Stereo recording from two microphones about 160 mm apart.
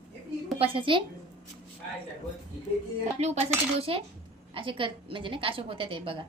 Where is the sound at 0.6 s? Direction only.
35° right (ahead or behind).